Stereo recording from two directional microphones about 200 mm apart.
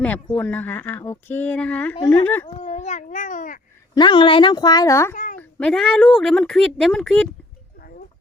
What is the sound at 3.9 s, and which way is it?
Speech, 25° left (ahead or behind).